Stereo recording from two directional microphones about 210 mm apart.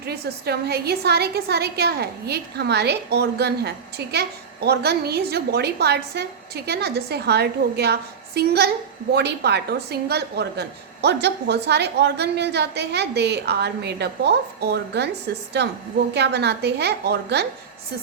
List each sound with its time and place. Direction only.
0.0 s a woman's voice: 50° right (ahead or behind)